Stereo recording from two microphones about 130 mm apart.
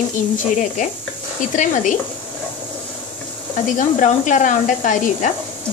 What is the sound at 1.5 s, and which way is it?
Speech, 80° left.